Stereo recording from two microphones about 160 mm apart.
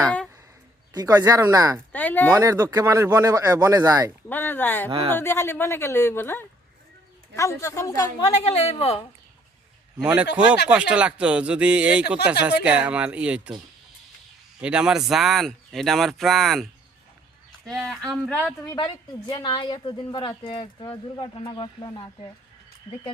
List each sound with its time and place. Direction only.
0.0 s speech: 5° left (ahead or behind)
0.9 s speech: 25° right (ahead or behind)
1.9 s speech: 10° left (ahead or behind)
2.4 s speech: 20° right (ahead or behind)
4.3 s a woman's voice: 10° left (ahead or behind)
4.9 s speech: 30° right (ahead or behind)
5.1 s a woman's voice: 15° left (ahead or behind)
8.4 s speech: 40° left (ahead or behind)
10.0 s speech: 5° right (ahead or behind)
14.6 s speech: 5° right (ahead or behind)
17.7 s speech: centre (ahead or behind)
18.6 s a woman's voice: 25° left (ahead or behind)